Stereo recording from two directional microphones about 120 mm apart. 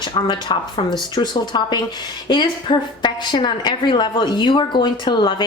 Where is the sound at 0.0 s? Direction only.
45° left (ahead or behind).